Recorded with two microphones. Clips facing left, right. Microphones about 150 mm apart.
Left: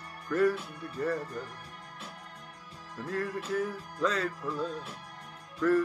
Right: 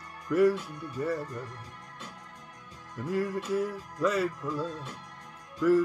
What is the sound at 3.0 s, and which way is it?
Music, 10° right (ahead or behind).